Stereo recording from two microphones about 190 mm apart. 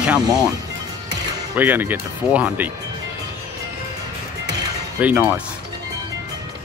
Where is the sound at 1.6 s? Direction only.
10° right (ahead or behind).